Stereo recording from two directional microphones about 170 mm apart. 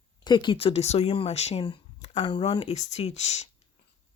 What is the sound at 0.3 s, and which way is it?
Speech, 30° left (ahead or behind).